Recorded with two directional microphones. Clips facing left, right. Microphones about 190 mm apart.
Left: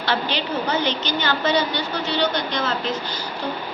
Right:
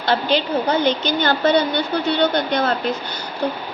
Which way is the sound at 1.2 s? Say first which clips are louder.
Right 4 dB; 55° right (ahead or behind).